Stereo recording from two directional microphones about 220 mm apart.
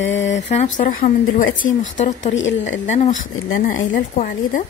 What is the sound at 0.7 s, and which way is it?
A woman's voice, 35° left (ahead or behind).